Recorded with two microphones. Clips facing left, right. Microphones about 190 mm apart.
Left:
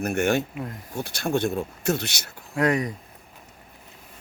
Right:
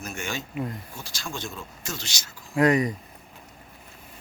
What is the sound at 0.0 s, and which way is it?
Speech, 60° left (ahead or behind).